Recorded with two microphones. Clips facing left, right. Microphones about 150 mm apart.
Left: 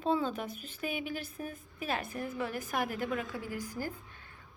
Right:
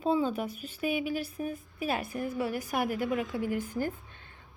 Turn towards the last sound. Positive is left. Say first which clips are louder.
# right 7 dB
turn(degrees=-20)  # may be behind; listen again after turning